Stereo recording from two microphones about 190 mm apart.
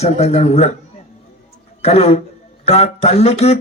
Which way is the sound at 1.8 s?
35° left (ahead or behind).